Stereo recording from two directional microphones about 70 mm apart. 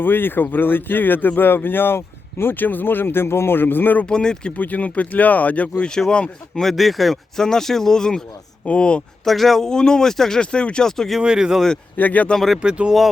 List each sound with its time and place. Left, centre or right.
0.0 s speech: left
4.0 s speech: centre
5.8 s speech: centre
6.6 s speech: centre
9.2 s speech: centre
11.2 s speech: centre
11.9 s speech: left
12.3 s speech: centre
12.6 s speech: centre